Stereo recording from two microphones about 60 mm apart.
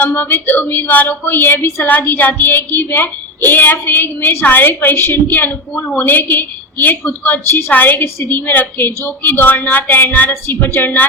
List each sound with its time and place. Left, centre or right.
0.1 s speech: left